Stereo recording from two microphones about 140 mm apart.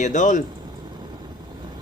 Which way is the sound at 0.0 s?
60° left (ahead or behind).